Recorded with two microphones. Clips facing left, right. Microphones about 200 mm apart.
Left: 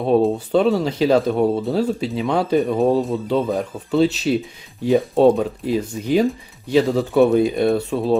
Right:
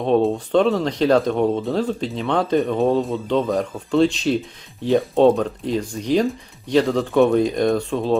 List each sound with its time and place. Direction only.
0.0 s speech: 5° left (ahead or behind)